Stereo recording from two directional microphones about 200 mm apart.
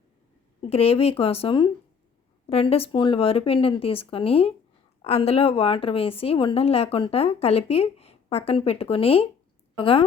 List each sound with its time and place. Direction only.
0.6 s a woman's voice: 30° left (ahead or behind)